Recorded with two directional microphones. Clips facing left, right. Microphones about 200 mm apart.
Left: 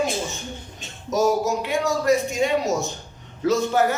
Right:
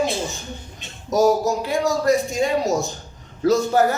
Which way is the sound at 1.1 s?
35° right (ahead or behind).